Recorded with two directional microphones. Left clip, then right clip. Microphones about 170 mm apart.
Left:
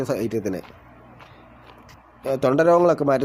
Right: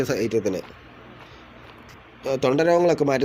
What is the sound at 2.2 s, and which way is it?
Speech, 40° left (ahead or behind).